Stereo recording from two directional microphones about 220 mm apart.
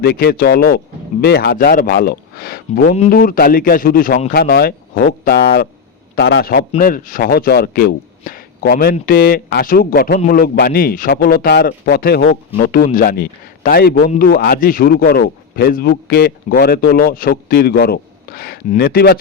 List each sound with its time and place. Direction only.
0.0 s speech: 45° left (ahead or behind)